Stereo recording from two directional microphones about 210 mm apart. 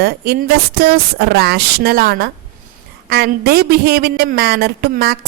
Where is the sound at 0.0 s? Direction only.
50° right (ahead or behind).